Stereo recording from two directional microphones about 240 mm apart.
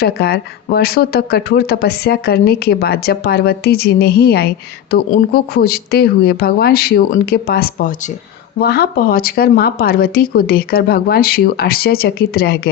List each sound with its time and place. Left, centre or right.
0.0 s speech: left